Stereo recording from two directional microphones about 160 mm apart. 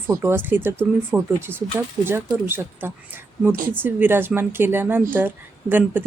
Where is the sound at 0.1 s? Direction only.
15° right (ahead or behind).